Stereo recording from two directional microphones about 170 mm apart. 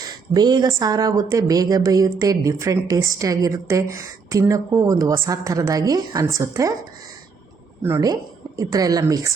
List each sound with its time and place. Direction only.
0.0 s speech: 25° right (ahead or behind)
7.8 s a woman's voice: 15° right (ahead or behind)